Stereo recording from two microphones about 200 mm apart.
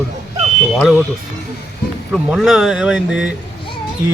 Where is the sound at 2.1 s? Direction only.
Centre (ahead or behind).